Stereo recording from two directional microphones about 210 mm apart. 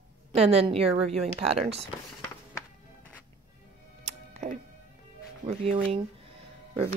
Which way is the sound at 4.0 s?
30° right (ahead or behind).